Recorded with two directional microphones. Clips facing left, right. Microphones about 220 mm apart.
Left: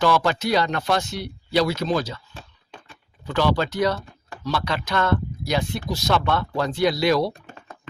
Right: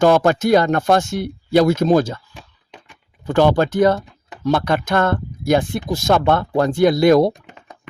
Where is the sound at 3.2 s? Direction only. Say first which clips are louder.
Right 7 dB; 50° right (ahead or behind).